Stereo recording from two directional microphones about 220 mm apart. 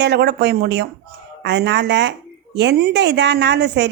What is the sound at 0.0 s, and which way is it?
A woman's voice, 50° right (ahead or behind).